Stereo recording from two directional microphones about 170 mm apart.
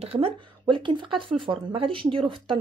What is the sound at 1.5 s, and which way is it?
A woman's voice, 30° right (ahead or behind).